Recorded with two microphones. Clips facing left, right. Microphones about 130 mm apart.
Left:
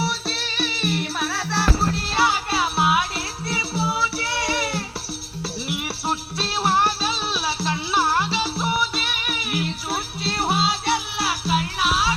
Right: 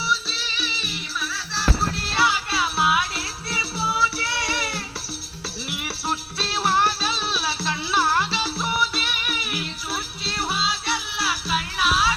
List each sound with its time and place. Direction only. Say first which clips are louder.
0.0 s music: left 2 dB; 60° left (ahead or behind)
2.1 s music: left 1 dB; 45° left (ahead or behind)
3.5 s music: left 2 dB; 25° left (ahead or behind)
6.7 s music: even; 45° left (ahead or behind)
7.1 s music: left 1 dB; 20° left (ahead or behind)
10.5 s music: left 5 dB; 55° left (ahead or behind)